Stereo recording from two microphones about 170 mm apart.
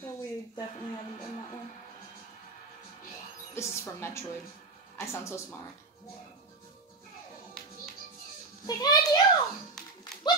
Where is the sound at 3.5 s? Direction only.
15° left (ahead or behind).